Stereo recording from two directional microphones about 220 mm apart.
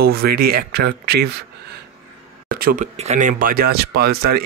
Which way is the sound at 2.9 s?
30° right (ahead or behind).